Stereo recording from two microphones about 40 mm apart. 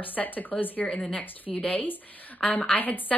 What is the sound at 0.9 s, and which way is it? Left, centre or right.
Speech, left.